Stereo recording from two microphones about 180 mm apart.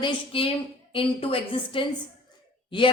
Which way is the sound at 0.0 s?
30° left (ahead or behind).